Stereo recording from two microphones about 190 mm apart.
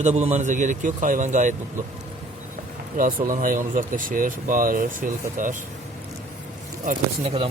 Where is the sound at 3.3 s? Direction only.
45° right (ahead or behind).